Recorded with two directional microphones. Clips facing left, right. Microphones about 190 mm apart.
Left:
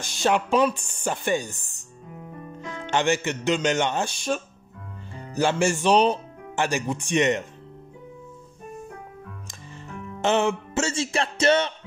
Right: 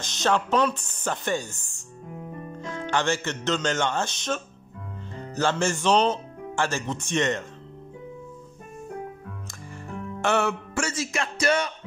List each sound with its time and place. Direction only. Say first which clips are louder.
0.2 s speech: left 2 dB; 10° left (ahead or behind)
2.6 s speech: left 2 dB; 15° left (ahead or behind)
10.2 s music: left 2 dB; 20° left (ahead or behind)